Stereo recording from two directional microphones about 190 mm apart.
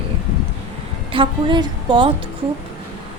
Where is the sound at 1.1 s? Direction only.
25° right (ahead or behind).